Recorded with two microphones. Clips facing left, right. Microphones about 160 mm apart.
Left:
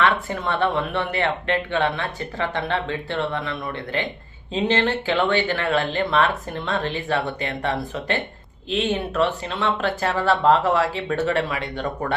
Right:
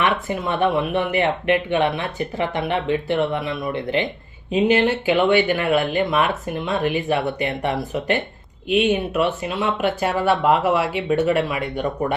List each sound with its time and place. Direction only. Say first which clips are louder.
0.0 s speech: even; 15° right (ahead or behind)